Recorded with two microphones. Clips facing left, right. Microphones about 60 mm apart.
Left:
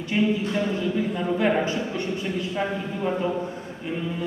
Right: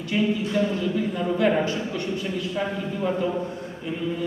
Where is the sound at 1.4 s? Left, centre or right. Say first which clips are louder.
Right 1 dB; centre.